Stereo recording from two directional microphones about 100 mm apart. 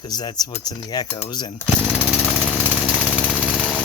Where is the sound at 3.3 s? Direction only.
10° left (ahead or behind).